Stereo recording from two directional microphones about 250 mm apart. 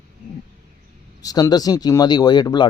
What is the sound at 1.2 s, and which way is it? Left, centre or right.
Speech, centre.